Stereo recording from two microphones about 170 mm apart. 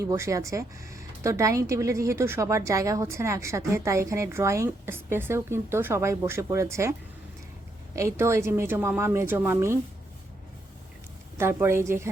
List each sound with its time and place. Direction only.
0.0 s speech: 20° right (ahead or behind)
7.9 s speech: 15° right (ahead or behind)
11.3 s speech: 15° right (ahead or behind)